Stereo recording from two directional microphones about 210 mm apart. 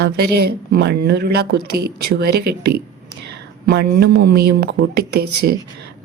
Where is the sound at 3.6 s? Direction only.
45° right (ahead or behind).